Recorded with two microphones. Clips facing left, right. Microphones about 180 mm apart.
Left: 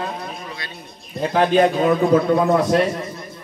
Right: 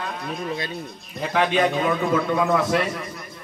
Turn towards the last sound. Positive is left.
turn(degrees=30)  # may be behind; listen again after turning